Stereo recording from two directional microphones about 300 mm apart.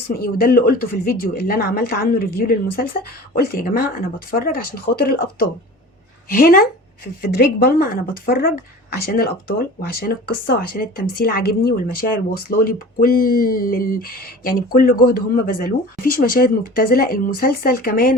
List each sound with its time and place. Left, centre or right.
0.1 s speech: left